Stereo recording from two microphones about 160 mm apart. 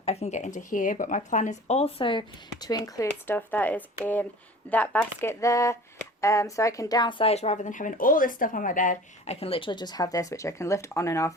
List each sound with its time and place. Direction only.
0.0 s speech: 40° left (ahead or behind); by 11.3 s 20° left (ahead or behind)